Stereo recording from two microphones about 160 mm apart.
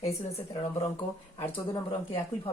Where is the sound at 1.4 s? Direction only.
15° left (ahead or behind).